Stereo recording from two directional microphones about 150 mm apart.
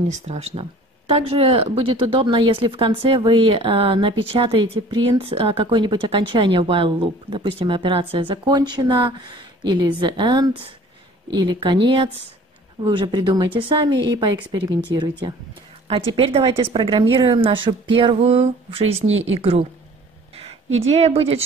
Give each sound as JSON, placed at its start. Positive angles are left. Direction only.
{"t": 0.1, "sound": "speech", "side_deg": -45}
{"t": 16.1, "sound": "a woman's voice", "side_deg": -40}